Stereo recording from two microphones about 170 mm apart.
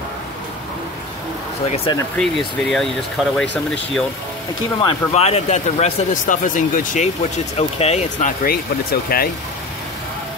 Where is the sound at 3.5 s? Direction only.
5° left (ahead or behind).